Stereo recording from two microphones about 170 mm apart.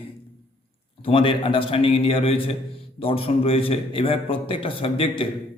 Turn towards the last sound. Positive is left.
turn(degrees=35)  # may be behind; listen again after turning